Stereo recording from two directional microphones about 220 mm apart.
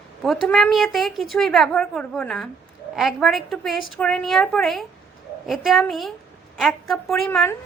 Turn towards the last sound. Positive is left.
turn(degrees=5)  # may be behind; listen again after turning